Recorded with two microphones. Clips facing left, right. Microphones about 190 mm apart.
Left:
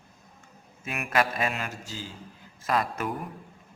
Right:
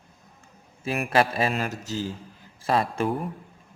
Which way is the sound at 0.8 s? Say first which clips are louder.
Right 4 dB; 30° right (ahead or behind).